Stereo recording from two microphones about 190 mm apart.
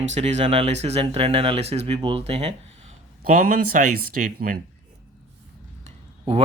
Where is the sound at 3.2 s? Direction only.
45° right (ahead or behind).